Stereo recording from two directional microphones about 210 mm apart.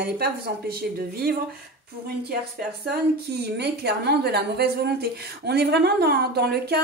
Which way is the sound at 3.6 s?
50° right (ahead or behind).